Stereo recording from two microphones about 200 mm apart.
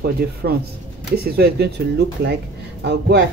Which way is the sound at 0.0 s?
55° right (ahead or behind).